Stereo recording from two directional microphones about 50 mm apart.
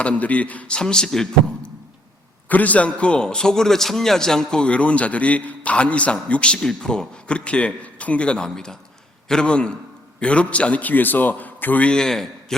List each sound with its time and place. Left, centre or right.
0.0 s speech: left
0.8 s a man's voice: centre
2.5 s a man's voice: left; by 4.7 s centre
4.7 s a man's voice: left
11.9 s a man's voice: centre